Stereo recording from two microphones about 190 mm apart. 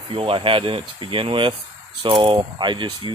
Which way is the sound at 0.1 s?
25° right (ahead or behind).